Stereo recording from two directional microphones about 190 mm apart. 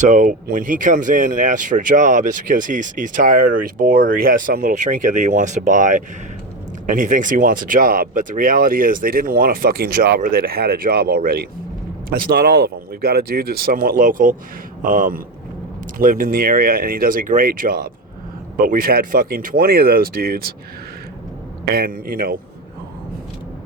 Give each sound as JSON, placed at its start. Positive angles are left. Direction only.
{"t": 0.0, "sound": "speech", "side_deg": -40}
{"t": 21.7, "sound": "speech", "side_deg": -55}